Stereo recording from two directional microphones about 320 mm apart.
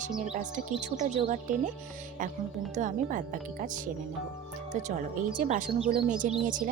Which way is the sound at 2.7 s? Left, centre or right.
Right.